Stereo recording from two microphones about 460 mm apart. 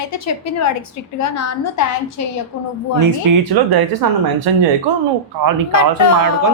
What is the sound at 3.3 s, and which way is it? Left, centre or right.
Speech, right.